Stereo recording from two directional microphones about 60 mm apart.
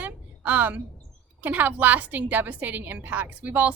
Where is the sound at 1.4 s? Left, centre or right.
Right.